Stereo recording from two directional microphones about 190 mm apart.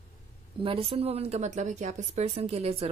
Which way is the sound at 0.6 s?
30° right (ahead or behind).